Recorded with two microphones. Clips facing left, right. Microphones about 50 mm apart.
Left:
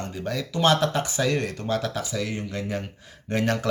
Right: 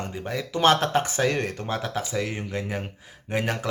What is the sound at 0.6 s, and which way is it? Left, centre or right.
Speech, right.